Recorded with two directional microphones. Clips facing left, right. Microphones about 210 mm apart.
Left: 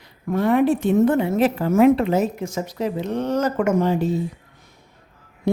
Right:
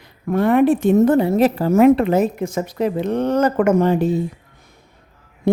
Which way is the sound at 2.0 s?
55° right (ahead or behind).